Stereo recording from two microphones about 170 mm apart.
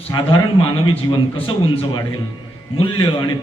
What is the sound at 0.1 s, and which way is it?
A man's voice, 30° left (ahead or behind).